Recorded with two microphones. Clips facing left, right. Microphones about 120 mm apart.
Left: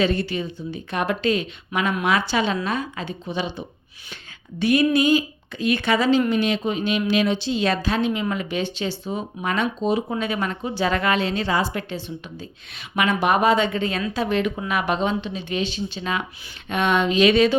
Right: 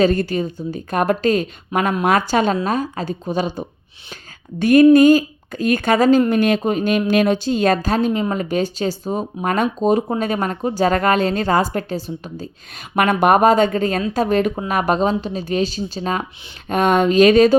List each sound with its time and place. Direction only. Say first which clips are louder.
0.0 s speech: right 6 dB; 45° right (ahead or behind)
13.0 s speech: right 6 dB; 50° right (ahead or behind)